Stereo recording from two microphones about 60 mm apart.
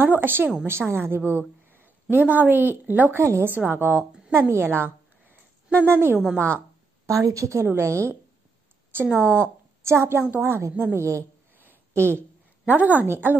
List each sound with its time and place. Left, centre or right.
0.0 s a woman's voice: right
3.2 s a woman's voice: right
4.3 s a woman's voice: right
4.8 s a sound: right
6.3 s a woman's voice: left
7.1 s a woman's voice: right
7.6 s a woman's voice: right
8.9 s speech: right
9.8 s a woman's voice: right
11.5 s a sound: right
11.9 s speech: right
12.6 s a woman's voice: right
13.0 s a woman's voice: right